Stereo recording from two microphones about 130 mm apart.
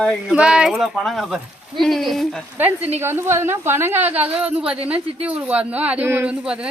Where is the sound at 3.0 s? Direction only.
20° right (ahead or behind).